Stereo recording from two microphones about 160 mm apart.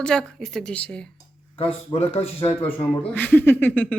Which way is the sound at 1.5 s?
40° left (ahead or behind).